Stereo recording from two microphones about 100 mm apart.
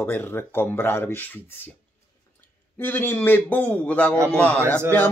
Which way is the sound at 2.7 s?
20° left (ahead or behind).